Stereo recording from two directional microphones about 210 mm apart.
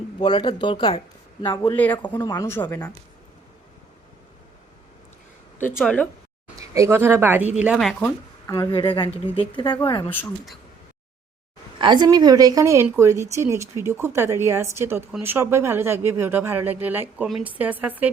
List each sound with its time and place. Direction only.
0.2 s speech: 20° left (ahead or behind)
1.5 s speech: 10° left (ahead or behind)
5.7 s speech: 5° left (ahead or behind)
6.6 s speech: 15° right (ahead or behind); by 8.1 s centre (ahead or behind)
8.4 s speech: 15° left (ahead or behind)
10.1 s speech: 5° left (ahead or behind)
11.8 s a woman's voice: 20° right (ahead or behind)